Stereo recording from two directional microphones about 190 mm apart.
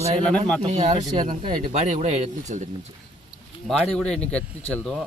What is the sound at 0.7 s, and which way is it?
Speech, 35° right (ahead or behind).